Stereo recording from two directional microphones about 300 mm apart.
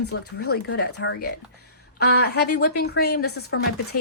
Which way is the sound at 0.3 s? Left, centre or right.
Left.